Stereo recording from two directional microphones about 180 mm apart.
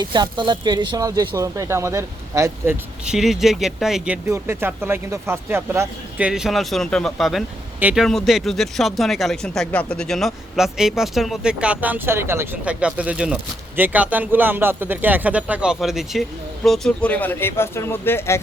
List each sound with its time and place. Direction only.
0.0 s speech: 25° right (ahead or behind)
3.1 s a man's voice: centre (ahead or behind)